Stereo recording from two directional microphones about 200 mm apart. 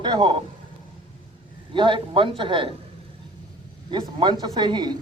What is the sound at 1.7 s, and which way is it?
A man's voice, 25° right (ahead or behind).